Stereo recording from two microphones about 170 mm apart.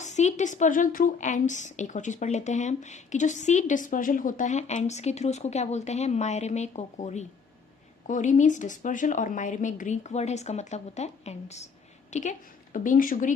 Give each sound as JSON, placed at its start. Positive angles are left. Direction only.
{"t": 0.0, "sound": "speech", "side_deg": 45}